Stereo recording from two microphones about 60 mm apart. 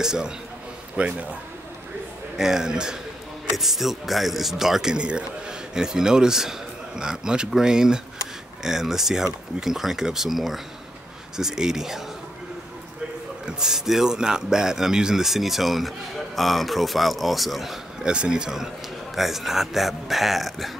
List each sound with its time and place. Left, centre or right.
0.0 s speech: centre
0.9 s a man's voice: right
2.3 s speech: centre
13.5 s speech: centre
18.0 s speech: centre